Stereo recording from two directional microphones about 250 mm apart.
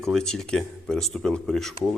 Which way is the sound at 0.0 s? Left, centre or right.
Centre.